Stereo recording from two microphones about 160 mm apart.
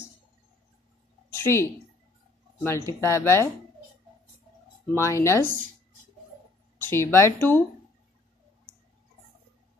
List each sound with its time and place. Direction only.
1.3 s a woman's voice: 15° left (ahead or behind)
4.9 s speech: 20° left (ahead or behind)
6.8 s speech: 15° left (ahead or behind)